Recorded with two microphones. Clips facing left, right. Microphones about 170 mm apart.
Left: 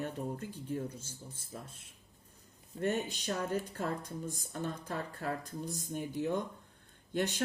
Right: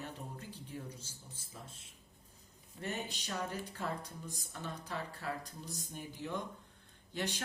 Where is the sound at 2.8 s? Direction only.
50° left (ahead or behind).